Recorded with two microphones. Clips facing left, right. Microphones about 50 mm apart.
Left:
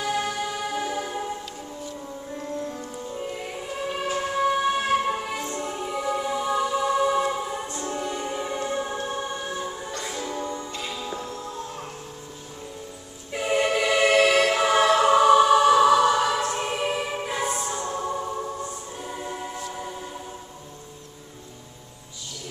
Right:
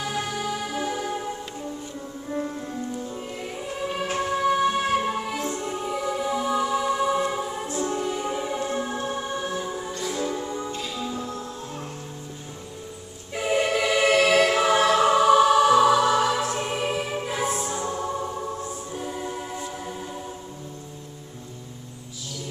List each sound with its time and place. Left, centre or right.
0.0 s music: centre
3.0 s music: centre
10.8 s music: centre
13.3 s choir: centre